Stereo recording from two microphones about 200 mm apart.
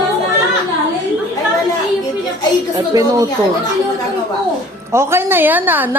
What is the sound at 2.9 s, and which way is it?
Speech, 15° right (ahead or behind).